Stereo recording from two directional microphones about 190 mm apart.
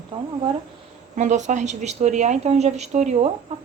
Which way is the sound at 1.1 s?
40° right (ahead or behind).